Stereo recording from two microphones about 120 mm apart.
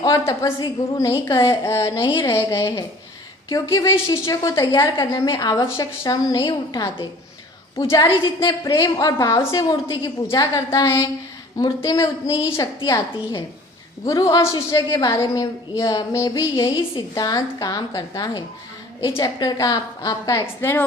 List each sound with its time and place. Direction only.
0.0 s a woman's voice: 35° left (ahead or behind)
1.9 s a woman's voice: 40° left (ahead or behind)
2.2 s a woman's voice: 30° left (ahead or behind)
6.3 s a woman's voice: 40° left (ahead or behind)
10.8 s speech: 25° left (ahead or behind)
12.3 s a woman's voice: 45° left (ahead or behind); by 16.6 s 30° left (ahead or behind)
16.6 s a woman's voice: 40° left (ahead or behind)
20.6 s speech: 20° left (ahead or behind)